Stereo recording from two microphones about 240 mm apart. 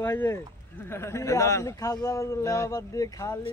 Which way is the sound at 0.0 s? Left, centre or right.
Centre.